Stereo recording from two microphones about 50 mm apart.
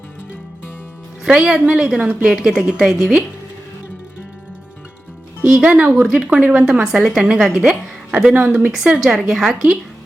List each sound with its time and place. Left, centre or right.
1.2 s a woman's voice: centre
5.5 s a woman's voice: centre
5.7 s a woman's voice: right; by 7.6 s centre
8.3 s speech: right
8.7 s a woman's voice: centre